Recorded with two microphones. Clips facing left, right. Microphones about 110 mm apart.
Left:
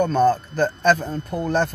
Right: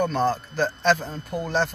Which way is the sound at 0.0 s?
55° left (ahead or behind).